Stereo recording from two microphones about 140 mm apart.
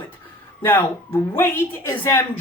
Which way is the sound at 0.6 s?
15° left (ahead or behind).